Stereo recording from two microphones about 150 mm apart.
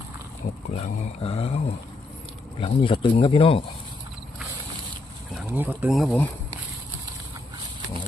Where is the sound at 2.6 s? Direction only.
35° left (ahead or behind).